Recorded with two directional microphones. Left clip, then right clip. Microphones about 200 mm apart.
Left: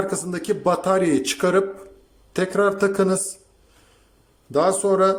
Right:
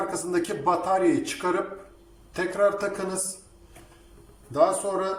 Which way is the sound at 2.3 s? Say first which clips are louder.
Left 3 dB; 60° left (ahead or behind).